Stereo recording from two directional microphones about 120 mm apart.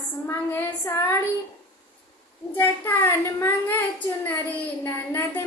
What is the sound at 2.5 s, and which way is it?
Speech, 15° left (ahead or behind).